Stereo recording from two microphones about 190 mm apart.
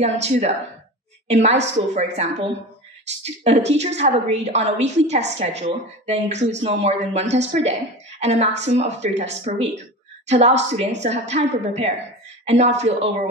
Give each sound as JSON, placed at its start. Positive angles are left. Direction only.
{"t": 0.0, "sound": "speech", "side_deg": -35}